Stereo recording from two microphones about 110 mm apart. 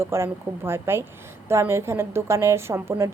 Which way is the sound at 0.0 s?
25° right (ahead or behind).